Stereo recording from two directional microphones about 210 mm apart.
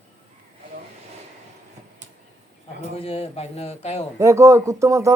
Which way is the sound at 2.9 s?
30° left (ahead or behind).